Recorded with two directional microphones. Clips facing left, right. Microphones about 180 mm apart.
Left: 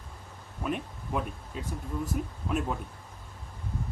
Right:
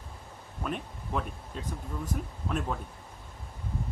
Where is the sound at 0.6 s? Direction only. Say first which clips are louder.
Left 2 dB; 10° left (ahead or behind).